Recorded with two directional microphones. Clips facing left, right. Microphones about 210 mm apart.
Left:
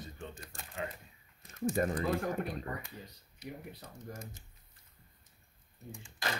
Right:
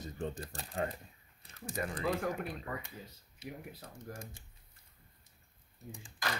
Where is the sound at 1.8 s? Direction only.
40° left (ahead or behind).